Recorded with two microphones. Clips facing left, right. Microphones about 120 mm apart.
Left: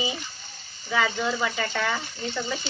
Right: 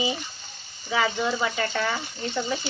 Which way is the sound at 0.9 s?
10° right (ahead or behind).